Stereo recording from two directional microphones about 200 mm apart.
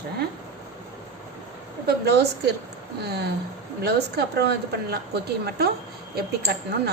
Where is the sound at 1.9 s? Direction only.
55° right (ahead or behind).